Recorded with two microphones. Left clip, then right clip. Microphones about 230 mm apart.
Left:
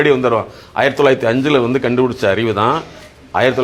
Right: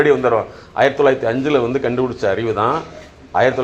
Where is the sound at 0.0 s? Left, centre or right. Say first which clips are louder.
Left 1 dB; left.